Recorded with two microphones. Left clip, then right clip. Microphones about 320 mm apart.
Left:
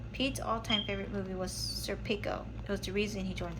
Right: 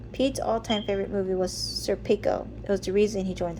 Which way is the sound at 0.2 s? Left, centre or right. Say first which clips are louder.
Right 8 dB; centre.